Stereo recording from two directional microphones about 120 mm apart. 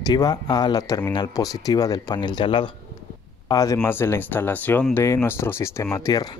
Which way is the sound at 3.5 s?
30° left (ahead or behind).